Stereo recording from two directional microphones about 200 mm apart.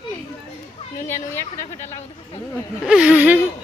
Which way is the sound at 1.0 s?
35° left (ahead or behind).